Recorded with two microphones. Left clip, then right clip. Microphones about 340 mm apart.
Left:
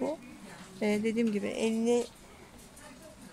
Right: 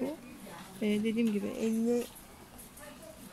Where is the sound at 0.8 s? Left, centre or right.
Centre.